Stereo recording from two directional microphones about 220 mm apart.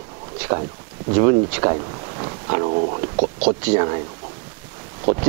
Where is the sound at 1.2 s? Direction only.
25° right (ahead or behind).